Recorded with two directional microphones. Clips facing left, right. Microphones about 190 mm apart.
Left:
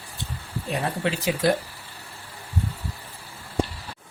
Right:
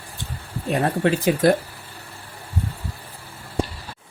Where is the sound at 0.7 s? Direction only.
50° right (ahead or behind).